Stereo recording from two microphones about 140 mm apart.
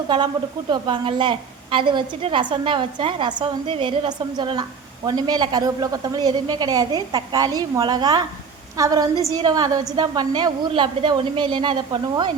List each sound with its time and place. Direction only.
0.7 s a woman's voice: 35° right (ahead or behind)